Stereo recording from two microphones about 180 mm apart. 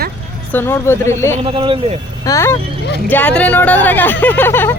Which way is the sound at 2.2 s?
15° left (ahead or behind).